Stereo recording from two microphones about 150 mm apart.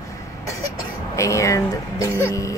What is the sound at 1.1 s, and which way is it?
Speech, 20° left (ahead or behind).